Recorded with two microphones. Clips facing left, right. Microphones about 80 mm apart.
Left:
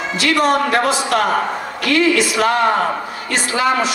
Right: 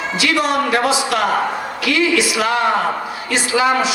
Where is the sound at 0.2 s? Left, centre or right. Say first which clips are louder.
Left 2 dB; left.